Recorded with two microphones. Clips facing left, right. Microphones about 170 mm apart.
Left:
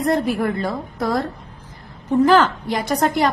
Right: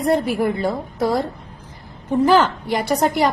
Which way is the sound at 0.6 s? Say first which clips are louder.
Right 3 dB; 20° right (ahead or behind).